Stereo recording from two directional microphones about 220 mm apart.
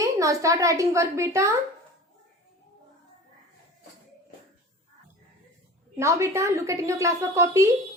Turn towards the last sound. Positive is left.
turn(degrees=-15)  # may be behind; listen again after turning